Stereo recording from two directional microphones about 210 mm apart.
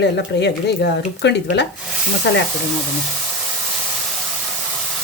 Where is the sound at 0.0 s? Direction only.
55° left (ahead or behind).